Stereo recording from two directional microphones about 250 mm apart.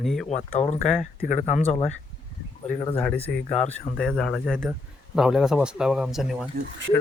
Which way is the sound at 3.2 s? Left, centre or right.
Left.